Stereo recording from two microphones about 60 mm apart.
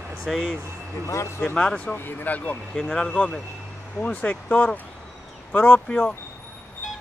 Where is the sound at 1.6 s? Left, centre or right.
Centre.